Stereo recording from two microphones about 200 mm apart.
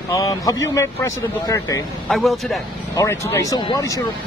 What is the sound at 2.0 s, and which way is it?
Speech, centre (ahead or behind).